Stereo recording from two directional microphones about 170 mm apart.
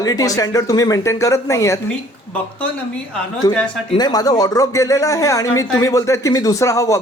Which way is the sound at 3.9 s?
25° left (ahead or behind).